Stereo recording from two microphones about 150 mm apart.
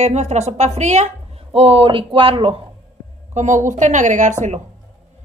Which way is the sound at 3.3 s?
55° right (ahead or behind).